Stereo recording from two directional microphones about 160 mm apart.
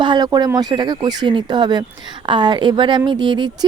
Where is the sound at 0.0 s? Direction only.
25° right (ahead or behind).